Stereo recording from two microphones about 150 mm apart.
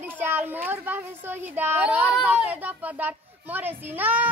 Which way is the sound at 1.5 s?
15° right (ahead or behind).